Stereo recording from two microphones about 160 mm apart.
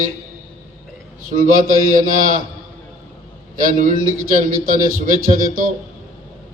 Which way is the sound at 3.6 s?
60° right (ahead or behind).